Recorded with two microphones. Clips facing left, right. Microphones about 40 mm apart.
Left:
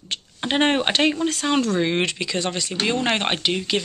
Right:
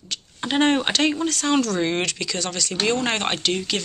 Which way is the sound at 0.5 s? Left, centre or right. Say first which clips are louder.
Even; left.